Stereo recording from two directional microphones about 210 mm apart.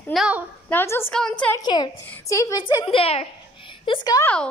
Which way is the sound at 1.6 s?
20° left (ahead or behind).